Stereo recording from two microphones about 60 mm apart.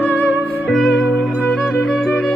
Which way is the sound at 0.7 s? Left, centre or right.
Centre.